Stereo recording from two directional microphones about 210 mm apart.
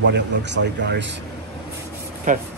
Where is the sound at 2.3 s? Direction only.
35° right (ahead or behind).